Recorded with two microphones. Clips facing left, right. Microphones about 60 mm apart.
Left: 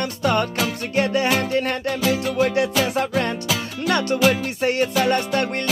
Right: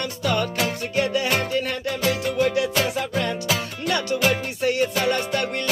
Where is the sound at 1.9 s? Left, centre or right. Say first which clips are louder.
Left 1 dB; centre.